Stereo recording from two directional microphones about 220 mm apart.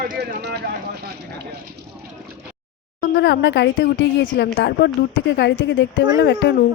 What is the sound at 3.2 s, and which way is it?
Speech, 55° left (ahead or behind).